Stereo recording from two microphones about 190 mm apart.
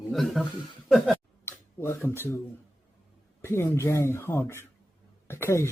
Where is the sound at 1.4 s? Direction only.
15° left (ahead or behind).